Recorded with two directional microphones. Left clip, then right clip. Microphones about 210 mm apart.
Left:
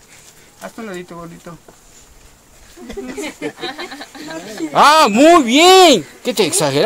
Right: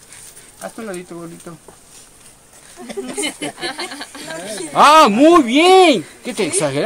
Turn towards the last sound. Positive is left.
turn(degrees=55)  # may be behind; listen again after turning